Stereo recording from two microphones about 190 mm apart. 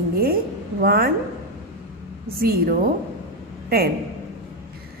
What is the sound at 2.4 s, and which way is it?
Speech, 50° right (ahead or behind).